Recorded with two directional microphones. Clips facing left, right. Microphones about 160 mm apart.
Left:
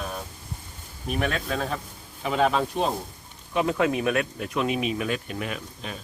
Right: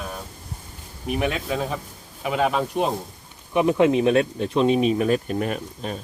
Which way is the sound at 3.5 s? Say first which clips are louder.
Right 6 dB; 20° right (ahead or behind).